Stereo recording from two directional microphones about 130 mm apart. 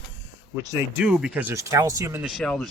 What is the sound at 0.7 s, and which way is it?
Speech, 20° right (ahead or behind).